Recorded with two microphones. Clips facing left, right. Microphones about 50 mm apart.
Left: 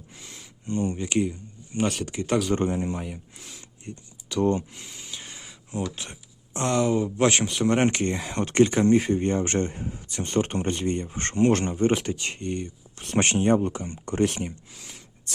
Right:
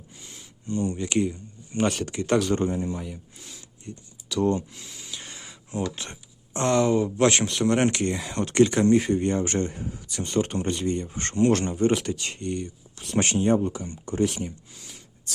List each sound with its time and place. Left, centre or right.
0.7 s speech: left
1.0 s speech: centre
2.6 s speech: left
3.6 s speech: left
4.9 s speech: centre; by 8.8 s left
9.0 s speech: centre
9.2 s speech: left
13.0 s speech: left